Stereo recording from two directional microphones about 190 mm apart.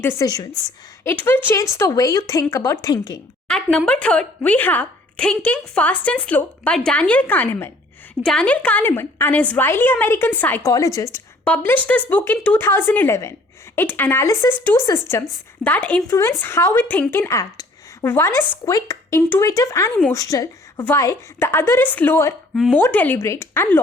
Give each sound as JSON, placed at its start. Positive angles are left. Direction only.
{"t": 0.0, "sound": "a woman's voice", "side_deg": 15}
{"t": 3.5, "sound": "a woman's voice", "side_deg": 5}
{"t": 22.5, "sound": "a woman's voice", "side_deg": 0}